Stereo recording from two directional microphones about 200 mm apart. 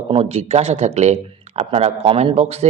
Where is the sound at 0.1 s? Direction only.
30° right (ahead or behind).